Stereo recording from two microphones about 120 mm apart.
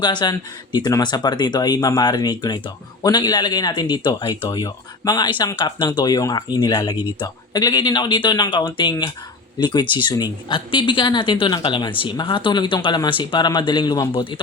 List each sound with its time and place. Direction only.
0.0 s speech: 40° left (ahead or behind)